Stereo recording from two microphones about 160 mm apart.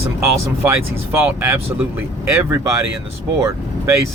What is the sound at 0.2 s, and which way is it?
Speech, 15° right (ahead or behind).